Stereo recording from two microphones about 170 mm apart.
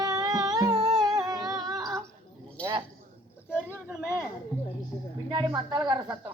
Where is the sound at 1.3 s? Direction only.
20° right (ahead or behind).